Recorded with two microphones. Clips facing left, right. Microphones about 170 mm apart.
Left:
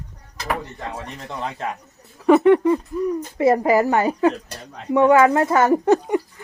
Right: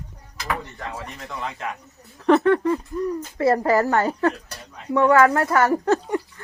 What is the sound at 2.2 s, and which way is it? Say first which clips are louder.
Speech: left 3 dB; 15° left (ahead or behind).